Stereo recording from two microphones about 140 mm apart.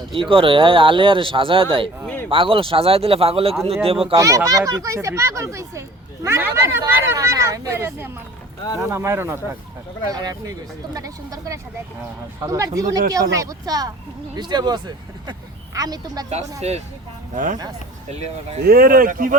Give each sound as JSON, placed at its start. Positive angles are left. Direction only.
{"t": 0.1, "sound": "speech", "side_deg": -40}
{"t": 4.1, "sound": "speech", "side_deg": -25}
{"t": 10.1, "sound": "speech", "side_deg": -30}
{"t": 16.6, "sound": "speech", "side_deg": -50}
{"t": 17.3, "sound": "speech", "side_deg": -65}
{"t": 18.1, "sound": "speech", "side_deg": -50}
{"t": 18.6, "sound": "speech", "side_deg": -90}